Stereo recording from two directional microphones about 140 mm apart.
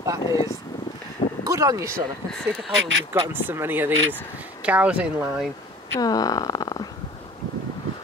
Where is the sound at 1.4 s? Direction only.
25° right (ahead or behind).